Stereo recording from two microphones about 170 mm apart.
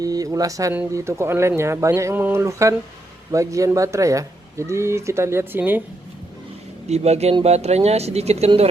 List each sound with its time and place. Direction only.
0.0 s speech: 20° right (ahead or behind)
6.8 s speech: 40° right (ahead or behind)